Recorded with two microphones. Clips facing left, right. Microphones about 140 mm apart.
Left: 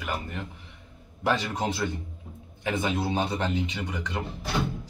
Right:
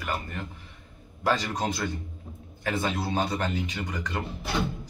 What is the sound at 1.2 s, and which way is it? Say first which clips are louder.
Speech: even; 20° left (ahead or behind).